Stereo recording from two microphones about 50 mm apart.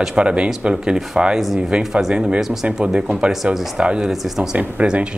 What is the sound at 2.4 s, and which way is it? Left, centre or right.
Speech, centre.